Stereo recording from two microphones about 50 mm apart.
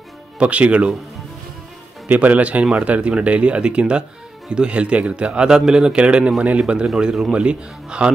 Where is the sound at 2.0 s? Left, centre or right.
Right; by 5.9 s centre.